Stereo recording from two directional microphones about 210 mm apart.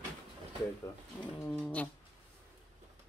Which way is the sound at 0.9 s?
10° left (ahead or behind).